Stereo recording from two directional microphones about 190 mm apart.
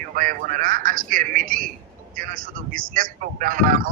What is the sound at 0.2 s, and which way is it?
A man's voice, 45° right (ahead or behind).